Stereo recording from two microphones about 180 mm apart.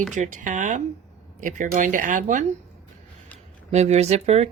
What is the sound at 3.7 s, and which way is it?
Speech, 35° right (ahead or behind).